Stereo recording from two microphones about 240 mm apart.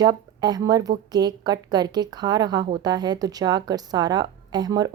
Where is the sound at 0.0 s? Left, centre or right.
Centre.